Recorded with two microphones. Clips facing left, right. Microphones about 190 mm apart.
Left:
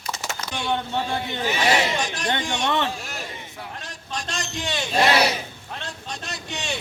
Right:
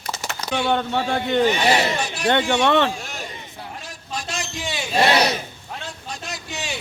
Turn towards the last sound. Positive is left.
turn(degrees=-5)  # may be behind; listen again after turning